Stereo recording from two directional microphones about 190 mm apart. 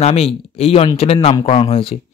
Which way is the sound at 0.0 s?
30° left (ahead or behind).